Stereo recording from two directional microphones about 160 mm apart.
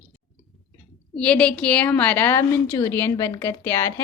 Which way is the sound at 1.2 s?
5° left (ahead or behind).